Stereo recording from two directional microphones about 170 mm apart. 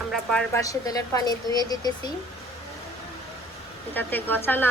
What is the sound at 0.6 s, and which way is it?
Speech, 20° left (ahead or behind).